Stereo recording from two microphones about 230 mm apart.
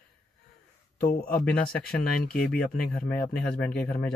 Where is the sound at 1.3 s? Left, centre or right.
Left.